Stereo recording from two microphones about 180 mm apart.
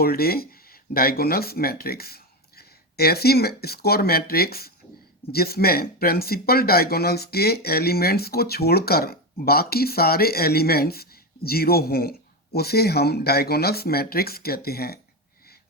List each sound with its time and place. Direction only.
0.0 s speech: 55° left (ahead or behind)